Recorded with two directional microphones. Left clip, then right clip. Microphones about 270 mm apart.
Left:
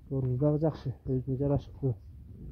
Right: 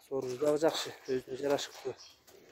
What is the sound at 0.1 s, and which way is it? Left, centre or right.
Speech, centre.